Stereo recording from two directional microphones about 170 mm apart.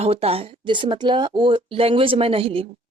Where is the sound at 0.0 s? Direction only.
35° right (ahead or behind).